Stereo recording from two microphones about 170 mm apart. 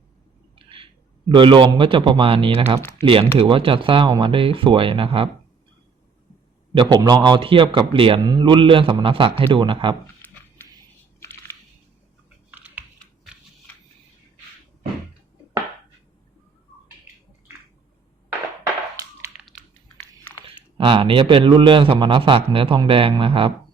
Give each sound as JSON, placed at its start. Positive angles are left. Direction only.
{"t": 1.3, "sound": "a man's voice", "side_deg": -30}
{"t": 6.7, "sound": "a man's voice", "side_deg": -25}
{"t": 10.2, "sound": "a sound", "side_deg": 10}
{"t": 11.2, "sound": "crushing", "side_deg": 15}
{"t": 12.5, "sound": "typing", "side_deg": -10}
{"t": 20.7, "sound": "a man's voice", "side_deg": -30}